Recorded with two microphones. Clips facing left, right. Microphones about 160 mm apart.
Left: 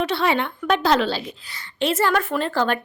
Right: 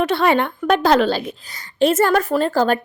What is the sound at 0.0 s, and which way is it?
A woman's voice, 50° right (ahead or behind).